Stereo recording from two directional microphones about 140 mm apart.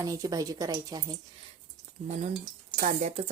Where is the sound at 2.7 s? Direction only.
65° right (ahead or behind).